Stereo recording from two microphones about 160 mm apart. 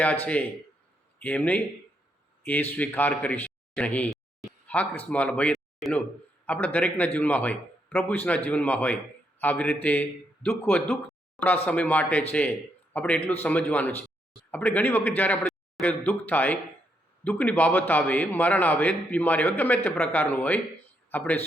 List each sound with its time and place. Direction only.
0.0 s speech: 10° left (ahead or behind)